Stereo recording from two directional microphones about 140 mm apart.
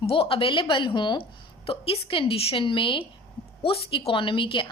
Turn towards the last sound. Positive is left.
turn(degrees=40)  # may be behind; listen again after turning